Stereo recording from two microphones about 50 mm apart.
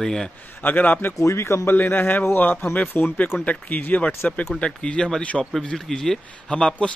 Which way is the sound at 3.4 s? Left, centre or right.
Left.